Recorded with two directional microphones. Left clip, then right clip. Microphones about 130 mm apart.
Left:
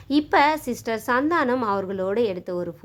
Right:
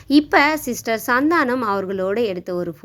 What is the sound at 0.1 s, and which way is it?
A woman's voice, 25° right (ahead or behind).